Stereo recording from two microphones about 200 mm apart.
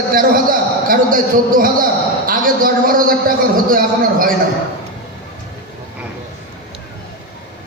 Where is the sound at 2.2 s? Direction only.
45° right (ahead or behind).